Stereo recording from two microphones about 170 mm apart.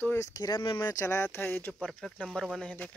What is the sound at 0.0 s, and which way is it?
Speech, 15° left (ahead or behind).